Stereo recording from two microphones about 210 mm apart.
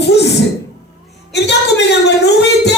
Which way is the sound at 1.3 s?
55° left (ahead or behind).